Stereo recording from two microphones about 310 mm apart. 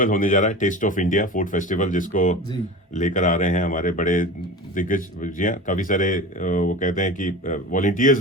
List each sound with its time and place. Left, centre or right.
0.0 s speech: left